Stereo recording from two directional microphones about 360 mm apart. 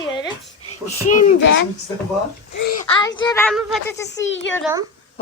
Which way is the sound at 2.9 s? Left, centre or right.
Centre.